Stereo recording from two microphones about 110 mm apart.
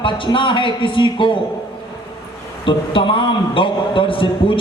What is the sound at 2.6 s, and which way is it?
A man's voice, 50° left (ahead or behind).